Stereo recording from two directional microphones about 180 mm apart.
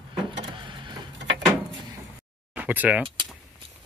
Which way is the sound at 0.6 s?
25° right (ahead or behind).